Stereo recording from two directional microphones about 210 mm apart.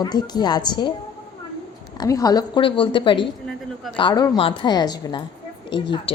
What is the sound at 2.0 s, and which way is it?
A woman's voice, 15° left (ahead or behind).